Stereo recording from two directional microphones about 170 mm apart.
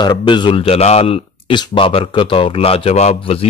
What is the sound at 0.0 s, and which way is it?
Speech, 25° left (ahead or behind).